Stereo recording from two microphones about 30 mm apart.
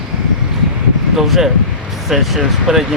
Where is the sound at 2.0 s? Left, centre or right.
Centre.